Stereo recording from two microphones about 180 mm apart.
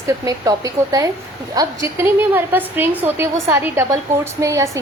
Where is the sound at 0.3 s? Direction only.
20° right (ahead or behind).